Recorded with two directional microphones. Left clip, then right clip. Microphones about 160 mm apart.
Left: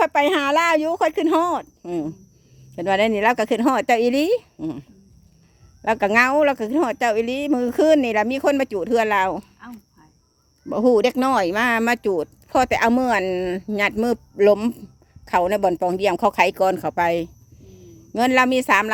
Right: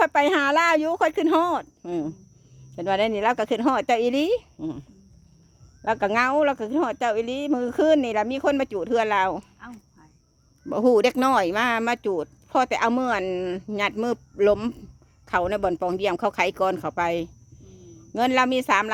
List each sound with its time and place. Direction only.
0.0 s speech: 5° left (ahead or behind)
2.7 s speech: 15° left (ahead or behind)
9.6 s a sound: centre (ahead or behind)
10.7 s speech: centre (ahead or behind)